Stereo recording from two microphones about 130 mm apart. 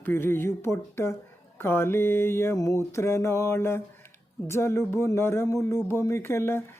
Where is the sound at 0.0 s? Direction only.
20° left (ahead or behind).